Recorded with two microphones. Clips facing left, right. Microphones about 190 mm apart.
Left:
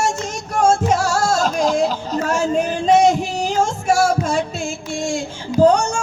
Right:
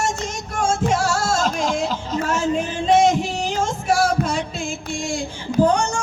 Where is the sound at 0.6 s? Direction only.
45° left (ahead or behind).